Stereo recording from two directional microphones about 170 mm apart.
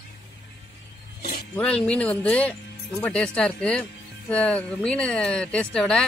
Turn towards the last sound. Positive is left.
turn(degrees=5)  # may be behind; listen again after turning